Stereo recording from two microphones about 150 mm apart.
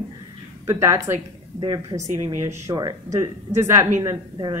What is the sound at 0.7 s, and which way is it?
Speech, 20° right (ahead or behind).